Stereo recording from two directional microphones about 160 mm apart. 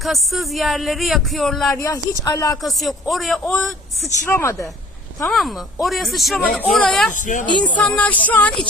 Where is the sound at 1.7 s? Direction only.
20° left (ahead or behind).